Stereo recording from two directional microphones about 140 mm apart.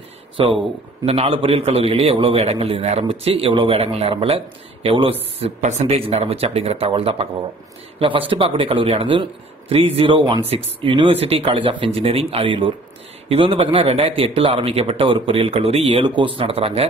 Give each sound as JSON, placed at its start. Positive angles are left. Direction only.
{"t": 0.4, "sound": "a man's voice", "side_deg": -40}